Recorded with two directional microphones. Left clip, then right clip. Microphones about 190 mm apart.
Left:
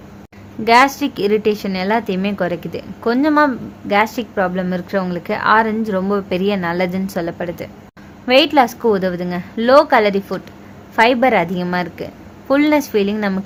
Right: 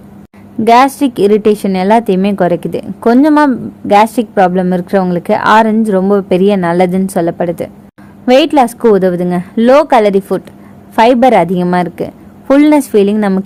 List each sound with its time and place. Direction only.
0.6 s a woman's voice: 45° right (ahead or behind)